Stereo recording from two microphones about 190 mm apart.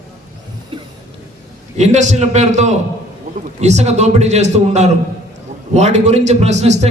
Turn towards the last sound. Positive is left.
turn(degrees=-35)  # may be behind; listen again after turning